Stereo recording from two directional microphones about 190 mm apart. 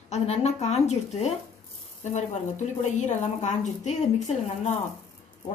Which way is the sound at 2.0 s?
40° left (ahead or behind).